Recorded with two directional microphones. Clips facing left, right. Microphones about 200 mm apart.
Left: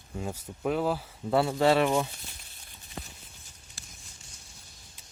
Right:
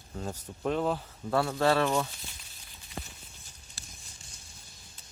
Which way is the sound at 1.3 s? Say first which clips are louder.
Left 3 dB; 15° left (ahead or behind).